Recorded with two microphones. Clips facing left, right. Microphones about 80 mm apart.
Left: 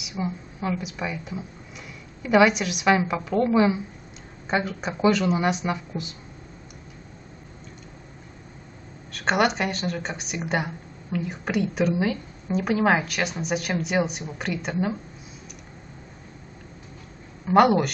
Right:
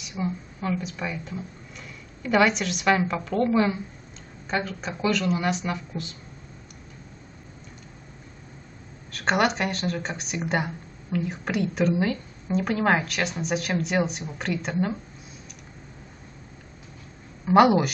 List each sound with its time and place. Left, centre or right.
0.0 s speech: centre
9.1 s speech: centre
17.5 s speech: centre